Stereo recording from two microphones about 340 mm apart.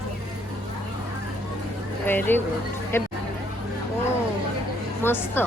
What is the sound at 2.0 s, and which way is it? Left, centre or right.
A woman's voice, centre.